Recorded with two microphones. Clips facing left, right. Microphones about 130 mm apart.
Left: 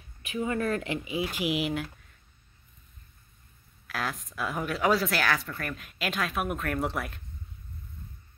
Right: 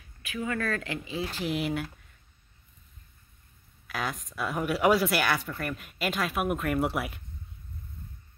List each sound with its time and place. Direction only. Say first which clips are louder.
0.2 s speech: left 2 dB; 25° left (ahead or behind); by 1.9 s centre (ahead or behind)
3.8 s speech: even; centre (ahead or behind)